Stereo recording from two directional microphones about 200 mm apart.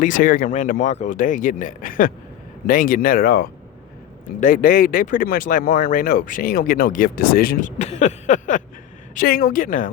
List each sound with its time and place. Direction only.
0.0 s speech: 40° left (ahead or behind)